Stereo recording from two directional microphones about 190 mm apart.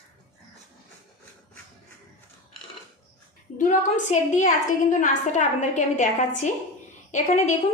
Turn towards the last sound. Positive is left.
turn(degrees=40)  # may be behind; listen again after turning